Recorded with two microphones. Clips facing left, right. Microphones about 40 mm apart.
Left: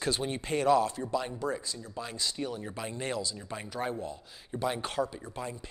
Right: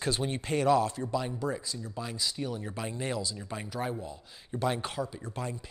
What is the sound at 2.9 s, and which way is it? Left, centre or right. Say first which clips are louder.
Speech: even; left.